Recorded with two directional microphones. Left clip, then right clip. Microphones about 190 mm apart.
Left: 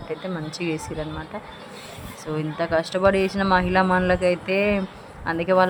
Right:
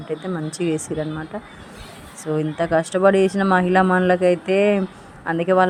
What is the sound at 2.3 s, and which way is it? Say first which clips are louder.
A woman's voice: right 3 dB; 20° right (ahead or behind).